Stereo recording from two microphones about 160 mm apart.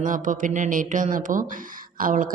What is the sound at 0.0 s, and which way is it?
A woman's voice, 55° right (ahead or behind).